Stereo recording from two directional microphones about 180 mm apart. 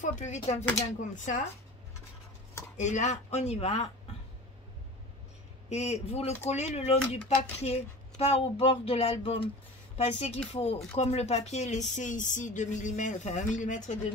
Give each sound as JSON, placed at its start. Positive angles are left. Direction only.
{"t": 0.0, "sound": "a woman's voice", "side_deg": 40}
{"t": 2.8, "sound": "speech", "side_deg": 40}
{"t": 5.7, "sound": "a woman's voice", "side_deg": 35}